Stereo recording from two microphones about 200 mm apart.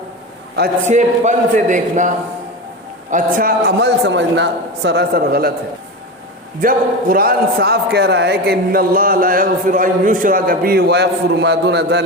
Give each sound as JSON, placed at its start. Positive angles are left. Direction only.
{"t": 0.9, "sound": "a man's voice", "side_deg": -35}
{"t": 6.6, "sound": "a man's voice", "side_deg": -45}